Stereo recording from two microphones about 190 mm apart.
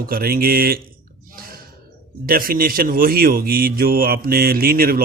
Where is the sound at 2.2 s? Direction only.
50° right (ahead or behind).